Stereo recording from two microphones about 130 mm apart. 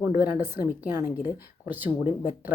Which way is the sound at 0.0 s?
15° right (ahead or behind).